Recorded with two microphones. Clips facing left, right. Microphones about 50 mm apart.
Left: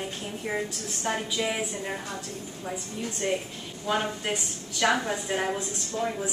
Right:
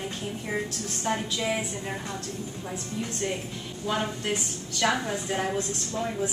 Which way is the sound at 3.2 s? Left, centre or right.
Centre.